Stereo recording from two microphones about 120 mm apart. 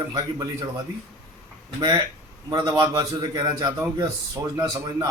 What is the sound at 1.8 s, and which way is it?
A man's voice, 35° right (ahead or behind).